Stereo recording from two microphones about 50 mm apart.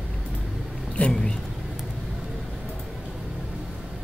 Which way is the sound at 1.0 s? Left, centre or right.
Left.